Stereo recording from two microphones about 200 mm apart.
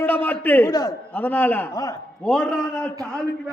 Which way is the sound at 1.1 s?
10° left (ahead or behind).